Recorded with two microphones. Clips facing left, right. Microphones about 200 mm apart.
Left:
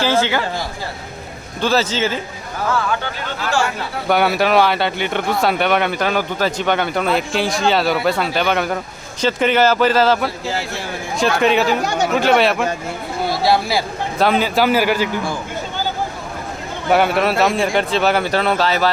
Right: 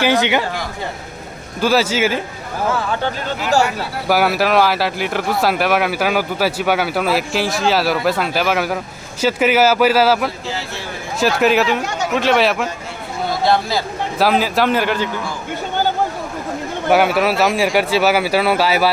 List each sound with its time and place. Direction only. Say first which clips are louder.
0.0 s speech: right 1 dB; 15° right (ahead or behind)
1.6 s speech: right 2 dB; 10° right (ahead or behind)
4.1 s speech: even; centre (ahead or behind)
11.8 s speech: left 3 dB; 35° left (ahead or behind)
12.1 s speech: even; centre (ahead or behind)
16.9 s speech: right 1 dB; centre (ahead or behind)